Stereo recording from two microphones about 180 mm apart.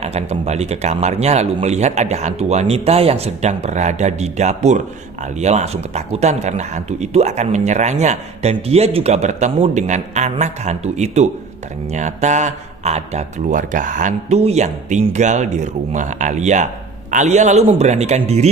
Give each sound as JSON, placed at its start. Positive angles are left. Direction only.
{"t": 0.0, "sound": "speech", "side_deg": -35}